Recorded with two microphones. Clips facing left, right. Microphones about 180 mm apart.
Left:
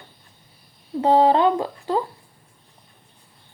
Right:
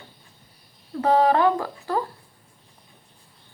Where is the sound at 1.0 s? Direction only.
25° left (ahead or behind).